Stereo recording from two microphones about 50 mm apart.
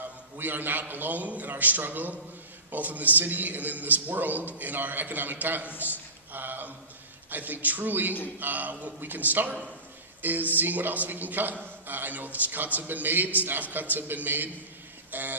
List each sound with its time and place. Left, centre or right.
0.4 s a man's voice: right
5.8 s a sound: right
7.2 s a man's voice: right